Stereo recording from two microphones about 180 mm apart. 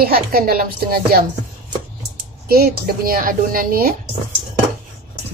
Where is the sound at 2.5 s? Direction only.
55° right (ahead or behind).